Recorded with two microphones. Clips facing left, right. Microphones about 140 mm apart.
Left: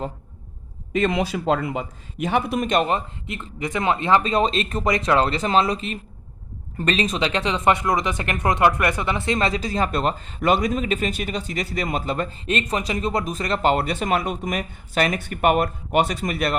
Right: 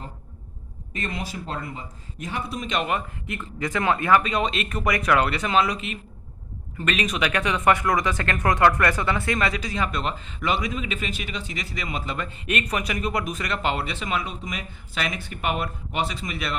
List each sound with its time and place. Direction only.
0.9 s speech: 90° left; by 2.6 s 70° left (ahead or behind)
2.6 s speech: 35° left (ahead or behind)